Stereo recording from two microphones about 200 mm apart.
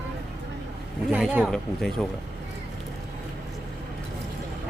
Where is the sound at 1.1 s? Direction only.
Centre (ahead or behind).